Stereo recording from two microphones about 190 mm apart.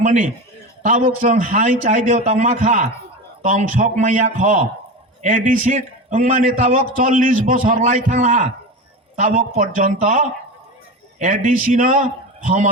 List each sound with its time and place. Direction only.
0.0 s a man's voice: 40° right (ahead or behind)